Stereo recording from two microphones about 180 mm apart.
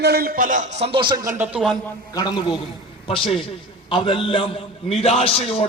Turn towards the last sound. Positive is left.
turn(degrees=35)  # may be behind; listen again after turning